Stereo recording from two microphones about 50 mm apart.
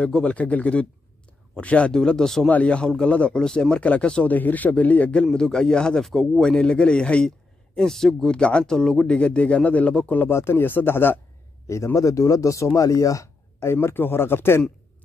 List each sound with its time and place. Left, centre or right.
0.0 s speech: left
2.0 s a man's voice: centre
2.5 s speech: left
3.3 s a man's voice: centre
3.7 s speech: left
4.3 s a man's voice: left
5.2 s a man's voice: centre
6.6 s a man's voice: centre
9.0 s speech: left
10.3 s speech: left
11.6 s speech: left
13.7 s speech: left